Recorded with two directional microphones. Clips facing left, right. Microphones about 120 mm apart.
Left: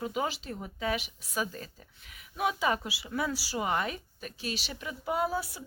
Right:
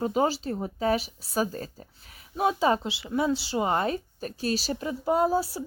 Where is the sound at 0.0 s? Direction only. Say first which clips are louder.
Right 8 dB; 35° right (ahead or behind).